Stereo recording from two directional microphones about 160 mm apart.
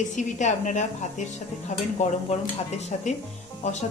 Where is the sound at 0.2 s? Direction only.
50° left (ahead or behind).